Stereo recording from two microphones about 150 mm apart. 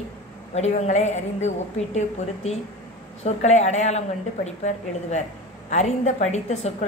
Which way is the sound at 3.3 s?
50° left (ahead or behind).